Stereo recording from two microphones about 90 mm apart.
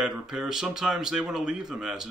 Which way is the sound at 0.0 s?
10° right (ahead or behind).